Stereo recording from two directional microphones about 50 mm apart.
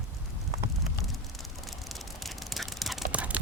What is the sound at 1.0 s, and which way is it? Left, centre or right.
Vehicle, centre.